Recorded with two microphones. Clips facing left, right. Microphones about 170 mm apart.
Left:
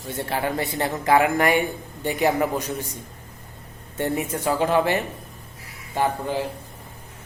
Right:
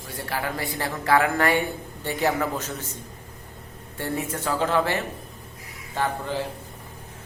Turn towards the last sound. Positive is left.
turn(degrees=15)  # may be behind; listen again after turning